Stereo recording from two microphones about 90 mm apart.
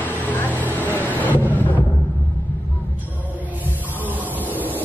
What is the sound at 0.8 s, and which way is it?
Vehicle, 20° left (ahead or behind).